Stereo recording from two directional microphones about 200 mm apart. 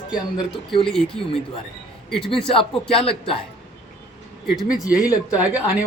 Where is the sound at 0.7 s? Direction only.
25° left (ahead or behind).